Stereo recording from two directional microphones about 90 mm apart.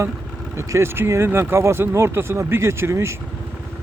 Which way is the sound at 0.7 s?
30° right (ahead or behind).